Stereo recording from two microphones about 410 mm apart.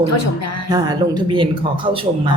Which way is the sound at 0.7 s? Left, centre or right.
Centre.